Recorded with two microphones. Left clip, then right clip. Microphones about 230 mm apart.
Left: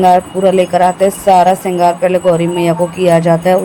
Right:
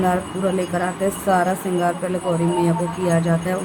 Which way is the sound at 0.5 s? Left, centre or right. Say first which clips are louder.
Left 13 dB; left.